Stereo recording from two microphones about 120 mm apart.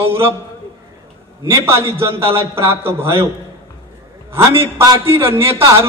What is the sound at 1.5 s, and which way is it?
A man's voice, 20° right (ahead or behind).